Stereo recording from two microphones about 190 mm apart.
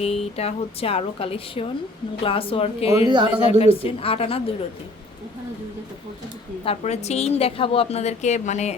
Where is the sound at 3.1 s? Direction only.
25° right (ahead or behind).